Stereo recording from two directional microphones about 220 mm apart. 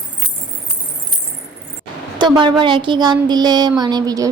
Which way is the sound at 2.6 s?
20° right (ahead or behind).